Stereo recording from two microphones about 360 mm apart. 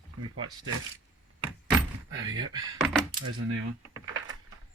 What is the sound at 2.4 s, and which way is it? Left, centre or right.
Speech, centre.